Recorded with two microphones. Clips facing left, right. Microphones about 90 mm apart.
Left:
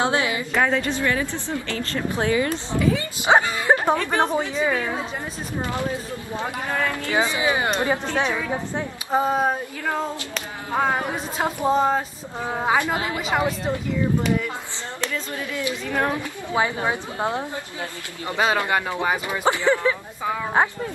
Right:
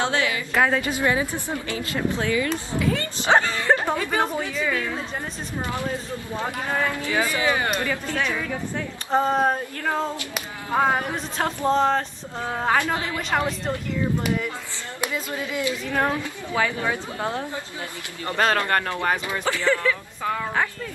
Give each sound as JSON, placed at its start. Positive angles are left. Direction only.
{"t": 0.0, "sound": "speech", "side_deg": 15}
{"t": 0.6, "sound": "a sound", "side_deg": -5}
{"t": 1.0, "sound": "speech", "side_deg": -15}
{"t": 2.3, "sound": "speech", "side_deg": 30}
{"t": 2.8, "sound": "speech", "side_deg": 5}
{"t": 4.0, "sound": "a sound", "side_deg": 0}
{"t": 6.4, "sound": "speech", "side_deg": -15}
{"t": 7.1, "sound": "a woman's voice", "side_deg": 20}
{"t": 9.1, "sound": "a sound", "side_deg": 5}
{"t": 11.3, "sound": "speech", "side_deg": 10}
{"t": 13.3, "sound": "a sound", "side_deg": 5}
{"t": 15.0, "sound": "speech", "side_deg": -15}
{"t": 15.6, "sound": "a woman's voice", "side_deg": 20}